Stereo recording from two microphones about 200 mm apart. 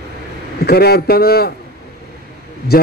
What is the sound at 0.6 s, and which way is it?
Speech, 55° left (ahead or behind).